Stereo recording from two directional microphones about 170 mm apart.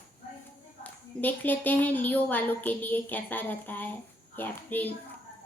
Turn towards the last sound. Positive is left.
turn(degrees=10)  # may be behind; listen again after turning